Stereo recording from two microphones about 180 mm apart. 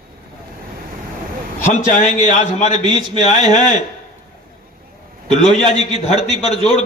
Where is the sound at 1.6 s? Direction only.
45° left (ahead or behind).